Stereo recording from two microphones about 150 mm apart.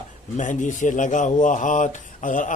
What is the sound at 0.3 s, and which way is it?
Speech, 55° left (ahead or behind).